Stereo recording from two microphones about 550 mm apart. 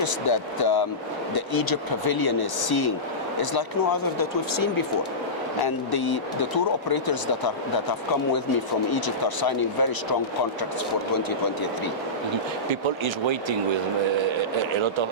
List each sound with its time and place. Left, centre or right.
0.0 s speech: left
13.2 s speech: right